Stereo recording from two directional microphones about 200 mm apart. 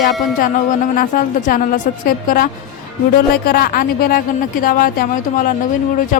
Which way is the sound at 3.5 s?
50° left (ahead or behind).